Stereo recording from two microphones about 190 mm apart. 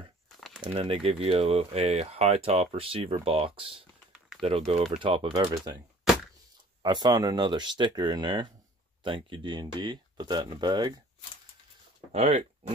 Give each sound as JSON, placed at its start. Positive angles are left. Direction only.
{"t": 0.6, "sound": "speech", "side_deg": -30}
{"t": 6.8, "sound": "speech", "side_deg": -20}
{"t": 12.1, "sound": "speech", "side_deg": -35}